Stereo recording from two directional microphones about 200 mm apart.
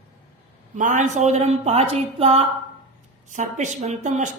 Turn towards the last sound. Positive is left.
turn(degrees=-35)  # may be behind; listen again after turning